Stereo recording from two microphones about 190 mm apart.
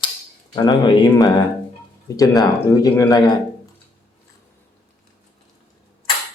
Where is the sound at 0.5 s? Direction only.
20° left (ahead or behind).